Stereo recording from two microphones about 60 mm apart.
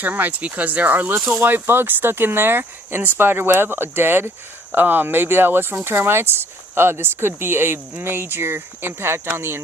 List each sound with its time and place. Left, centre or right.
0.0 s speech: right